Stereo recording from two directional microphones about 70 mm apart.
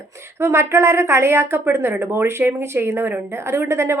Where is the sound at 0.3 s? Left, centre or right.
Right.